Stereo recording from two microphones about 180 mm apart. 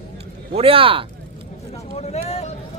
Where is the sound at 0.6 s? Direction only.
30° right (ahead or behind).